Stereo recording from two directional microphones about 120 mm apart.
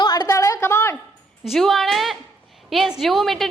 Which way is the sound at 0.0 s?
35° left (ahead or behind).